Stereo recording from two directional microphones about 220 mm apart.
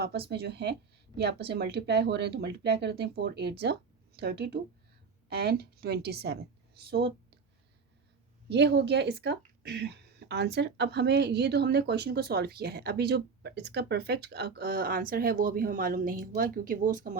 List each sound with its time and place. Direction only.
0.3 s a woman's voice: 50° right (ahead or behind)
8.4 s speech: 50° right (ahead or behind)